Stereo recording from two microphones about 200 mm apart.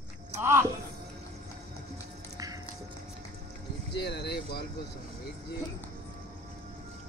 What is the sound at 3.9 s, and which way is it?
Vehicle, 55° left (ahead or behind).